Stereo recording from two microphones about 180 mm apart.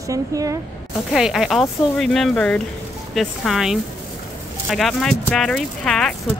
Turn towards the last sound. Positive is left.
turn(degrees=5)  # may be behind; listen again after turning